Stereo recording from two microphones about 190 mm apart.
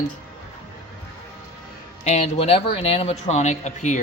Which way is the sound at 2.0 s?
35° left (ahead or behind).